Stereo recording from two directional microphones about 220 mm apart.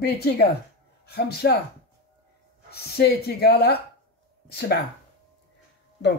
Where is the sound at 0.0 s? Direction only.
45° left (ahead or behind).